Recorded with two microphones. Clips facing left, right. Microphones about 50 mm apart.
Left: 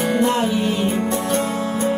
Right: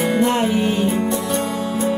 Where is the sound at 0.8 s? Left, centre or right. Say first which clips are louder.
Right 1 dB; left.